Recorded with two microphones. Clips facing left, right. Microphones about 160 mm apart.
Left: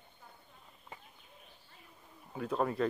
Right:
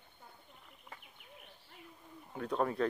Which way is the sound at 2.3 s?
5° left (ahead or behind).